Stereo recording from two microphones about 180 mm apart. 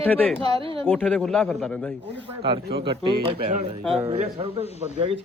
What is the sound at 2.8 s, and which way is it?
A man's voice, 30° right (ahead or behind).